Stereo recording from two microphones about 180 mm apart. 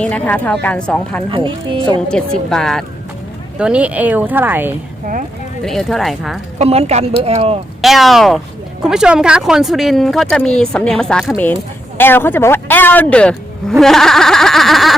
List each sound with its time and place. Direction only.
0.0 s speech: 10° left (ahead or behind)
1.3 s speech: 25° right (ahead or behind)
2.0 s speech: 5° left (ahead or behind); by 4.7 s 10° right (ahead or behind)
5.6 s speech: centre (ahead or behind)
6.6 s a woman's voice: 35° right (ahead or behind)
7.8 s speech: centre (ahead or behind)